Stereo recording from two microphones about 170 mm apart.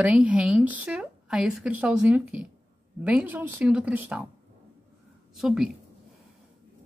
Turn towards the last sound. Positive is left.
turn(degrees=0)  # may be behind; listen again after turning